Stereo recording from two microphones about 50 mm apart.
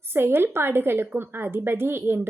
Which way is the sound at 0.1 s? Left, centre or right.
Right.